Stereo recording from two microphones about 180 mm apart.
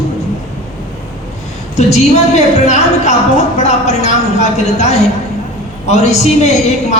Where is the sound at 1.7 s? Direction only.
40° left (ahead or behind).